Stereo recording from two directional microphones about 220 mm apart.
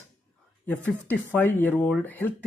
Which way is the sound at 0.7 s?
10° left (ahead or behind).